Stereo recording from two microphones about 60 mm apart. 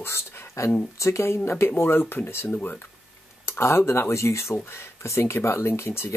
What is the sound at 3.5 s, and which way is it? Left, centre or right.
Speech, left.